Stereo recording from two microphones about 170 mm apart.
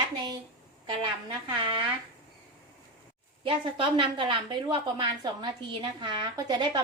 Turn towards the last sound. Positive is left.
turn(degrees=-25)  # may be behind; listen again after turning